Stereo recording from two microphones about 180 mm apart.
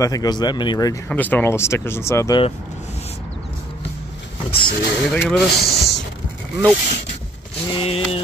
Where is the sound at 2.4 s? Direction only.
35° left (ahead or behind).